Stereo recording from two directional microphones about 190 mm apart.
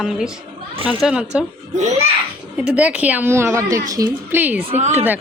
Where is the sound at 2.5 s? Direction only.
5° right (ahead or behind).